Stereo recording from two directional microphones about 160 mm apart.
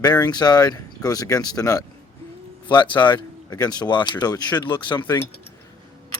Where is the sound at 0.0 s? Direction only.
25° left (ahead or behind).